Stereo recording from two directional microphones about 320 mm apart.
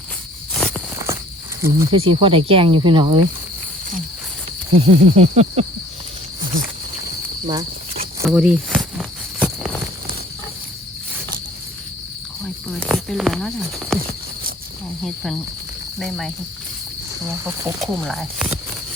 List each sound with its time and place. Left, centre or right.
0.5 s walk: centre
1.6 s speech: centre
4.7 s speech: centre
7.4 s cricket: centre
8.4 s a sound: centre
12.8 s speech: centre
15.0 s speech: centre
17.4 s speech: centre